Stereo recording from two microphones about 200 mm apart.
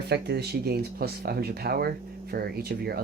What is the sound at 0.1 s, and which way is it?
Speech, 55° right (ahead or behind).